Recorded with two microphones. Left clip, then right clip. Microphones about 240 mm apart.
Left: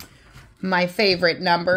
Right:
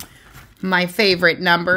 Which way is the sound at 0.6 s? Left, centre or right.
Centre.